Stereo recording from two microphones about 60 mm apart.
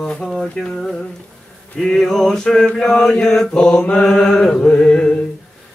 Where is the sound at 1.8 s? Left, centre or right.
Centre.